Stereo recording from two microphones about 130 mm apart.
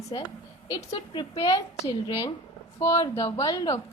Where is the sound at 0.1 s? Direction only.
35° left (ahead or behind).